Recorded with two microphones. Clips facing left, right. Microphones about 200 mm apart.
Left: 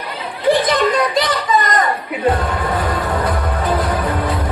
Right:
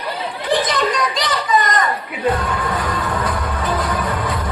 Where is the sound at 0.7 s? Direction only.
55° left (ahead or behind).